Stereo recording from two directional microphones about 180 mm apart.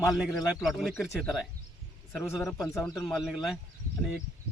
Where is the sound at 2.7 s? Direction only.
20° left (ahead or behind).